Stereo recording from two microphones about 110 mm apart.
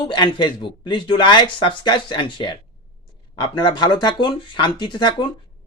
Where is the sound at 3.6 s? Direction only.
40° left (ahead or behind).